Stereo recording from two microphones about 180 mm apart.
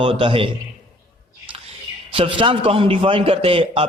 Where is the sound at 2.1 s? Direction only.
30° right (ahead or behind).